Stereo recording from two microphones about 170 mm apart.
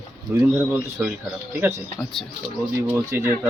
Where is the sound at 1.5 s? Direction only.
15° right (ahead or behind).